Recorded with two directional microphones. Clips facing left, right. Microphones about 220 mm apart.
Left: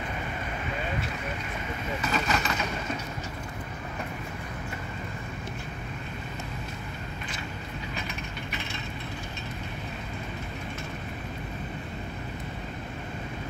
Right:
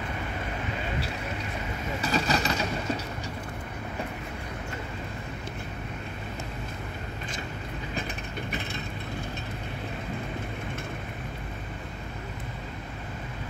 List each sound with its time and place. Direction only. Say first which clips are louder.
2.0 s vehicle: right 3 dB; 35° right (ahead or behind)